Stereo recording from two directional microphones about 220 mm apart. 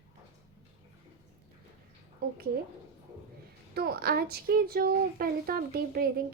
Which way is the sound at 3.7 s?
45° right (ahead or behind).